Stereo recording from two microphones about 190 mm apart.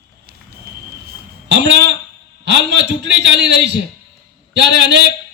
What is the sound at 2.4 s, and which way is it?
A man's voice, 65° right (ahead or behind).